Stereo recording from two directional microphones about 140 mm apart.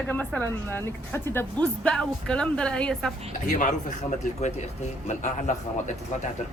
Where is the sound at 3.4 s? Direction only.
60° left (ahead or behind).